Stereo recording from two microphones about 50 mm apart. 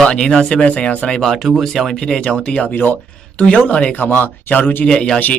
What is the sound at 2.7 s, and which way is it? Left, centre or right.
Speech, left.